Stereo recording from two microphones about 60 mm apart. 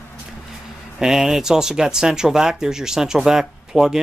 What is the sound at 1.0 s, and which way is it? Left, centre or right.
Speech, centre.